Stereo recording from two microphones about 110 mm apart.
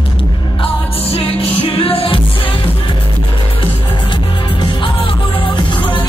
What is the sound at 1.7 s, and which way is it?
Music, 55° left (ahead or behind).